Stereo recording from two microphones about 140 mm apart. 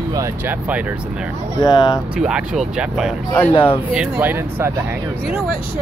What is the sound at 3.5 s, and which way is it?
Speech, 35° left (ahead or behind).